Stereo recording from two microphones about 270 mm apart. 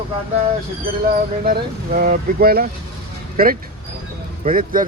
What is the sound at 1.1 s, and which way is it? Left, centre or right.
Speech, right.